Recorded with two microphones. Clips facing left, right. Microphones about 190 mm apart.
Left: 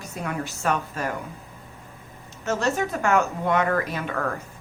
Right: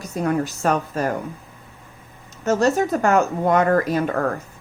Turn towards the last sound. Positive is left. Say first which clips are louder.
# right 7 dB
turn(degrees=-40)  # may be behind; listen again after turning